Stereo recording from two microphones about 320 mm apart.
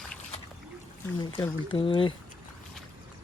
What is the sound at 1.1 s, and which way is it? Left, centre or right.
Speech, centre.